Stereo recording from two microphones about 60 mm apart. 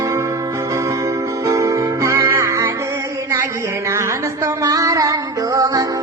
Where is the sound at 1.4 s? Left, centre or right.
Right.